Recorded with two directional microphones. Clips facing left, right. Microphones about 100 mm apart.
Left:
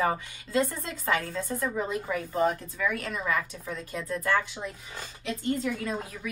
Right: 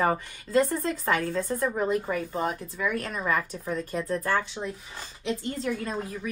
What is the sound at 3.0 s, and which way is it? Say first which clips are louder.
Speech: right 2 dB; 40° right (ahead or behind).